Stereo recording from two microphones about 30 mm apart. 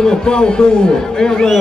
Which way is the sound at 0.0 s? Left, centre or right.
Left.